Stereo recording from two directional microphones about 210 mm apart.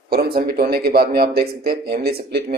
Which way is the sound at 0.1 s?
45° right (ahead or behind).